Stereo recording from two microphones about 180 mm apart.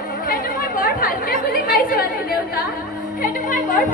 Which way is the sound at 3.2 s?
45° left (ahead or behind).